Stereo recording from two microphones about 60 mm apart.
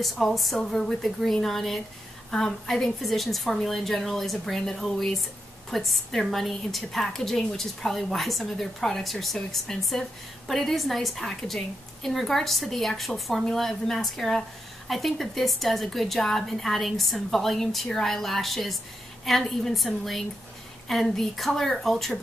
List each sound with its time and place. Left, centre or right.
0.0 s a woman's voice: centre